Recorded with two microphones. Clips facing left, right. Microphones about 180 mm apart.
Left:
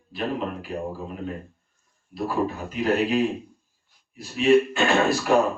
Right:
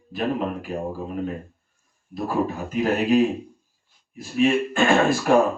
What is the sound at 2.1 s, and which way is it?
A man's voice, 45° right (ahead or behind).